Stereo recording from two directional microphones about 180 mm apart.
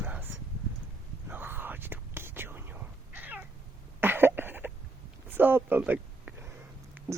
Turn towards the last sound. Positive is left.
turn(degrees=-10)  # may be behind; listen again after turning